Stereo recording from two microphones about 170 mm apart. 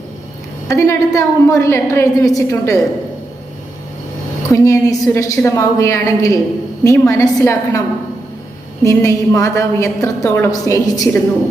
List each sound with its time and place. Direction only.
0.7 s a woman's voice: 20° left (ahead or behind)
4.5 s a woman's voice: 20° left (ahead or behind)
8.8 s a woman's voice: 20° left (ahead or behind)